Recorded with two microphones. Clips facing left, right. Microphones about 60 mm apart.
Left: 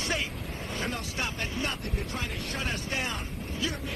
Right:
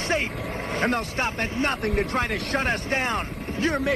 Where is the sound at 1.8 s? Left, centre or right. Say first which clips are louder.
Right 11 dB; right.